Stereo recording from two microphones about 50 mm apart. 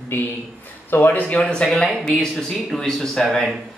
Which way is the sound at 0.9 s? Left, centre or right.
Left.